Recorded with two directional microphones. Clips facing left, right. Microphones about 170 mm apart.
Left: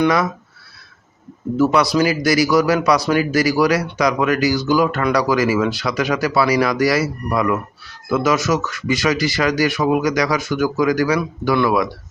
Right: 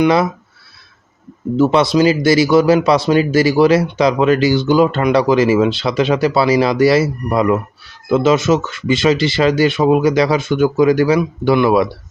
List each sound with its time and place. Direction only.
1.5 s a man's voice: 25° right (ahead or behind)